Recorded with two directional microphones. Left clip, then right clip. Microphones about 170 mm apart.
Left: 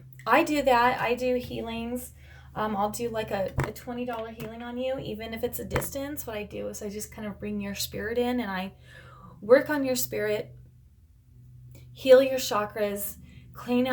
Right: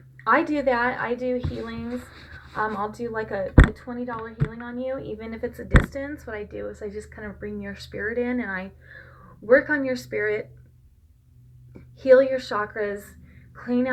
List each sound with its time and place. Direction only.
0.3 s a woman's voice: 40° left (ahead or behind)
2.6 s a woman's voice: 40° left (ahead or behind)
11.9 s a woman's voice: 45° left (ahead or behind)